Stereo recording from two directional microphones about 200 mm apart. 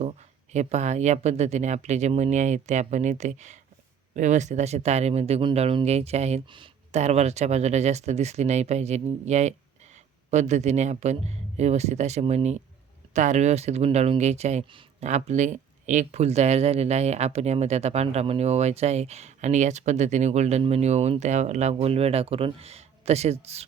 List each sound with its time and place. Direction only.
0.0 s speech: 35° right (ahead or behind)